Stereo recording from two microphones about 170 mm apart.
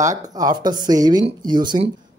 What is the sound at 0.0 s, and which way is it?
Speech, 20° right (ahead or behind).